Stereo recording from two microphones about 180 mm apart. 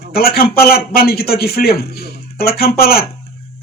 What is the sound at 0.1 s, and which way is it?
Speech, 60° left (ahead or behind).